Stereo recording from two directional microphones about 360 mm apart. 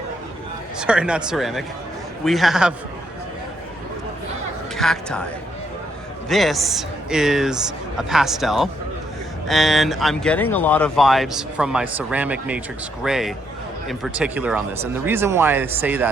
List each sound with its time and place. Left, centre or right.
0.8 s speech: centre
4.8 s speech: centre